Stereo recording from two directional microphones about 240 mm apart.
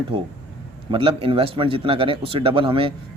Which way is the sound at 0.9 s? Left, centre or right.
Right.